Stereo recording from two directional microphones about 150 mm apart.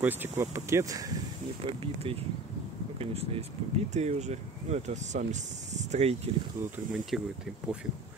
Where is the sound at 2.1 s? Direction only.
35° right (ahead or behind).